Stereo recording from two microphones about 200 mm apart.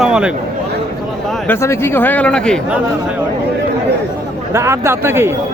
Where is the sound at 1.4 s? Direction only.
15° left (ahead or behind).